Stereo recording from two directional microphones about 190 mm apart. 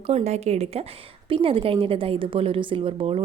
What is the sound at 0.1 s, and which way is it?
A woman's voice, 35° right (ahead or behind).